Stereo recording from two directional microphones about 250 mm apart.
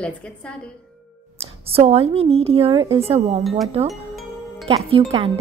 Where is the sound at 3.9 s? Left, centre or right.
Centre.